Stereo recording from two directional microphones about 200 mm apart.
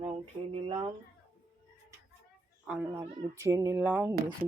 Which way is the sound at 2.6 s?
5° right (ahead or behind).